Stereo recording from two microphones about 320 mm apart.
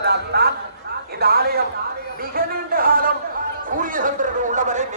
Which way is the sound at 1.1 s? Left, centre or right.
Right.